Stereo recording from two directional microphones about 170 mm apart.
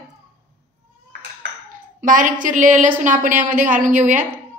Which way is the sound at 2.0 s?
50° right (ahead or behind).